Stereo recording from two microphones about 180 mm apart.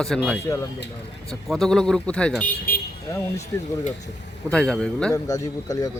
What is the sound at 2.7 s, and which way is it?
Vehicle, 55° left (ahead or behind).